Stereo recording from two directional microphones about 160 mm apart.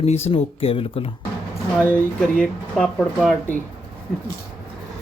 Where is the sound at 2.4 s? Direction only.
5° left (ahead or behind).